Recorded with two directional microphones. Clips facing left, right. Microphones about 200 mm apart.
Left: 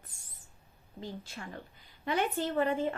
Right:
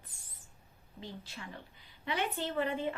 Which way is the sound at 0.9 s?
50° left (ahead or behind).